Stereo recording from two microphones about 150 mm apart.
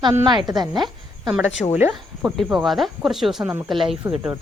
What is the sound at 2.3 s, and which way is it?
Speech, centre (ahead or behind).